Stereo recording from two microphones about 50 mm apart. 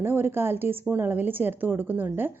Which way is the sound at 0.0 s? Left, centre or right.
Right.